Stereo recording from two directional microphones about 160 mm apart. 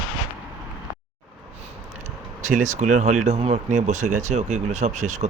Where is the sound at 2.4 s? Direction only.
50° right (ahead or behind).